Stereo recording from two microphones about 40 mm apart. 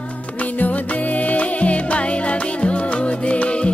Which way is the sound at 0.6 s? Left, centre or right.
Left.